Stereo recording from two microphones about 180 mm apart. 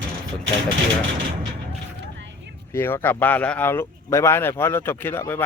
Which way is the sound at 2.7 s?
10° left (ahead or behind).